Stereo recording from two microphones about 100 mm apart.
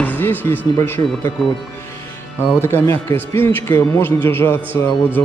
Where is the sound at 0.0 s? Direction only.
20° left (ahead or behind).